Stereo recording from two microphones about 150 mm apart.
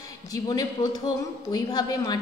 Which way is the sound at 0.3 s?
25° left (ahead or behind).